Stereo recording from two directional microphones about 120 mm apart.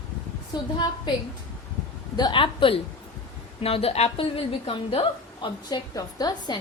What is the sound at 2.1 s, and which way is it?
A woman's voice, 40° left (ahead or behind).